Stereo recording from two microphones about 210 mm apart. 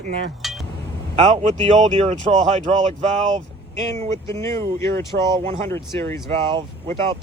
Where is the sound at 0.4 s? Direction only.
Centre (ahead or behind).